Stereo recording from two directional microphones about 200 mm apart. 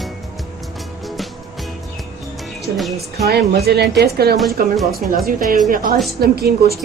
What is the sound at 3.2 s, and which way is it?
Speech, 55° right (ahead or behind).